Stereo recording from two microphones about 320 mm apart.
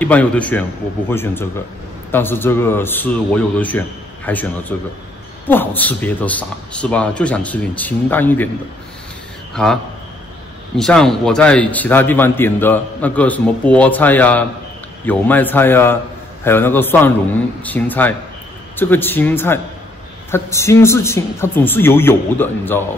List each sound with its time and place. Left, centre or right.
0.0 s a man's voice: centre
9.6 s a man's voice: centre
10.8 s a man's voice: centre